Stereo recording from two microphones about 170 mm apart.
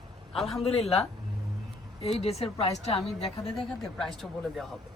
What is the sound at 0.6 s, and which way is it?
A woman's voice, 35° left (ahead or behind).